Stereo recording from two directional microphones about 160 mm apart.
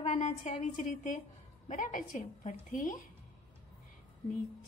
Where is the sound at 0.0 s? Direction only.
45° left (ahead or behind).